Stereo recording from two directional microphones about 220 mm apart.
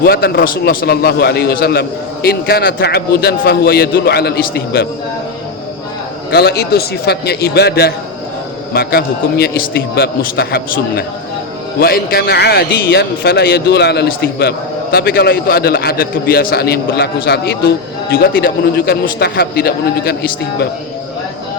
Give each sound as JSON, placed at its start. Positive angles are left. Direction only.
{"t": 0.0, "sound": "a man's voice", "side_deg": 45}
{"t": 6.3, "sound": "a man's voice", "side_deg": 45}